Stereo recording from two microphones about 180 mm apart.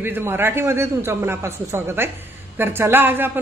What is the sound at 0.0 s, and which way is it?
A man's voice, 10° right (ahead or behind).